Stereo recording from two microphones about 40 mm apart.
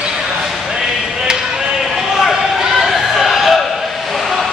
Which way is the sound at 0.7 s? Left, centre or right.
Centre.